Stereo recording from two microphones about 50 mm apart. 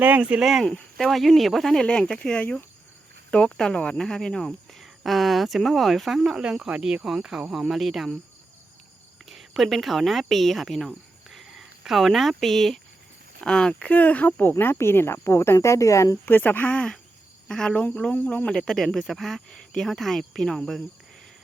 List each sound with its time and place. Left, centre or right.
0.2 s speech: centre
0.9 s speech: centre
1.8 s speech: centre
6.3 s speech: centre
9.3 s speech: centre
13.4 s speech: centre
13.9 s speech: left
14.6 s speech: left
16.2 s speech: left
16.7 s speech: centre
18.1 s speech: left
18.4 s speech: centre